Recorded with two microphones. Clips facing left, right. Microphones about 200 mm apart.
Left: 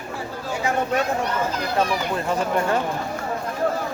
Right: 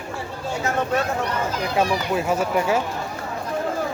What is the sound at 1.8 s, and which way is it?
Speech, 10° right (ahead or behind).